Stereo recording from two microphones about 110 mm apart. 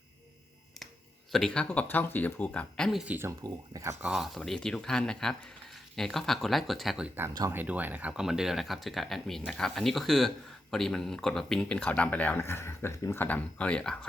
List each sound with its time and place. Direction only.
1.3 s speech: 5° left (ahead or behind)
3.1 s speech: 20° right (ahead or behind)
3.4 s speech: 35° right (ahead or behind)
4.0 s speech: 5° right (ahead or behind)
7.5 s speech: 15° right (ahead or behind); by 14.1 s 10° left (ahead or behind)